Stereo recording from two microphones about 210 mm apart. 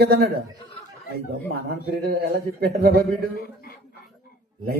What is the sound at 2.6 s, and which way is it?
Speech, 50° right (ahead or behind).